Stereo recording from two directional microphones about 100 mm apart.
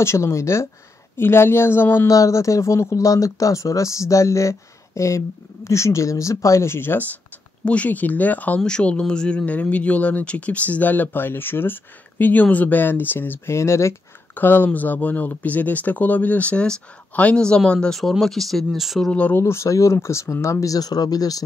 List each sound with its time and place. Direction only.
0.0 s speech: 30° left (ahead or behind)
2.1 s speech: 35° left (ahead or behind)
14.3 s speech: 20° left (ahead or behind); by 19.1 s centre (ahead or behind)
19.1 s speech: 15° left (ahead or behind)
19.4 s speech: 30° left (ahead or behind)
20.6 s speech: 40° left (ahead or behind)